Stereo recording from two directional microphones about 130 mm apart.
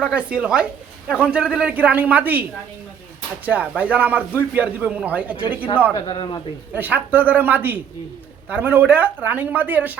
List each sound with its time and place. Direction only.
0.0 s a woman's voice: 10° right (ahead or behind)
6.1 s a man's voice: 40° left (ahead or behind)
6.7 s speech: 15° right (ahead or behind)